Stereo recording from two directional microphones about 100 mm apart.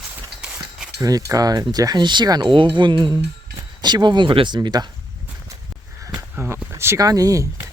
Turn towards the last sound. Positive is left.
turn(degrees=-35)  # may be behind; listen again after turning